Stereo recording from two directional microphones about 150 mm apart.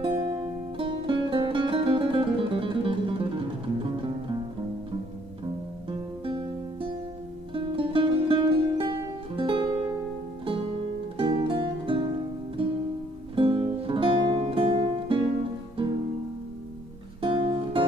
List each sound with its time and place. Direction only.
0.0 s music: 30° right (ahead or behind)
5.9 s music: 35° right (ahead or behind)
11.1 s music: 35° right (ahead or behind)
17.2 s music: 35° right (ahead or behind)